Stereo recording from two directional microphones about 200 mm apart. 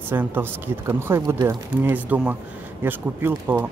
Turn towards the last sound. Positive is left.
turn(degrees=-10)  # may be behind; listen again after turning